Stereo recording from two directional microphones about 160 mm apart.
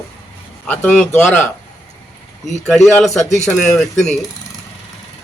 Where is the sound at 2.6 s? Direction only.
5° left (ahead or behind).